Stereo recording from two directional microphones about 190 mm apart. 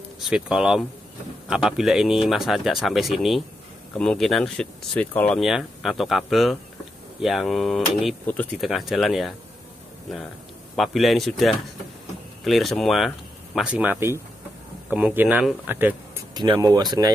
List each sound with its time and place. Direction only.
0.2 s speech: 5° right (ahead or behind)
10.8 s speech: centre (ahead or behind)
16.3 s speech: 20° right (ahead or behind)